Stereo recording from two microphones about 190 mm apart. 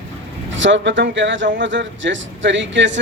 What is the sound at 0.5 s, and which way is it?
Speech, 75° right (ahead or behind).